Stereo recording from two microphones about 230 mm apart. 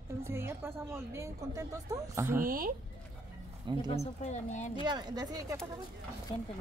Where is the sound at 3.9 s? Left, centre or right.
Left.